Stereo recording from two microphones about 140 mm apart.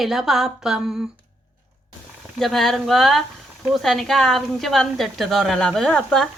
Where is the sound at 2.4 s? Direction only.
Centre (ahead or behind).